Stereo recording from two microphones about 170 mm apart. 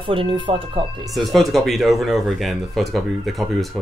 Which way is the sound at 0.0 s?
30° right (ahead or behind).